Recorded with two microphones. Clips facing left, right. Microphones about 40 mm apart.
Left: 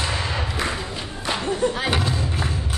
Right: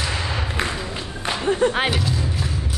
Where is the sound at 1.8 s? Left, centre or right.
Left.